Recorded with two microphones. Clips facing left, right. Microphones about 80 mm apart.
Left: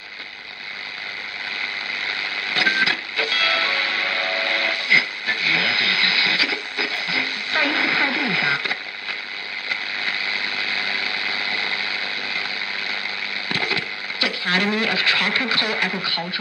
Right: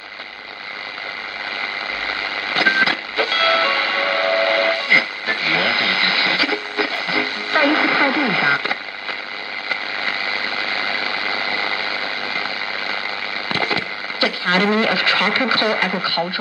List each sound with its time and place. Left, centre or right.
2.0 s music: right
9.7 s a sound: right
13.5 s speech: right